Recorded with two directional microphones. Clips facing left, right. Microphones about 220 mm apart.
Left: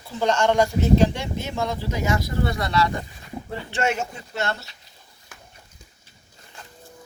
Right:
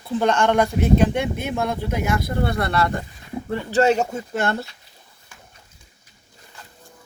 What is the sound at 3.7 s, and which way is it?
Speech, 35° right (ahead or behind).